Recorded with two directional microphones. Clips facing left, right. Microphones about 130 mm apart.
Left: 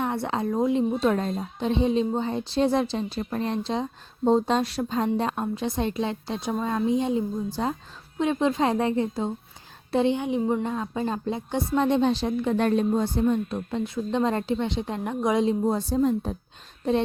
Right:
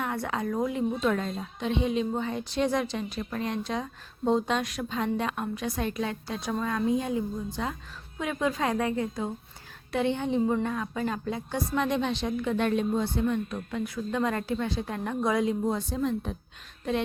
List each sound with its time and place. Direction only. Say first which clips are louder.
0.0 s a woman's voice: left 4 dB; 25° left (ahead or behind)